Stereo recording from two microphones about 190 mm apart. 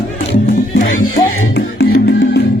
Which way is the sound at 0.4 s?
45° left (ahead or behind).